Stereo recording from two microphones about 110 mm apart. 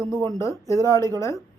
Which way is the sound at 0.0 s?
25° left (ahead or behind).